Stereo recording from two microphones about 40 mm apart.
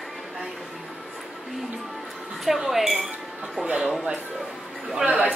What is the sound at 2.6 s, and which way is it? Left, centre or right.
Chink, centre.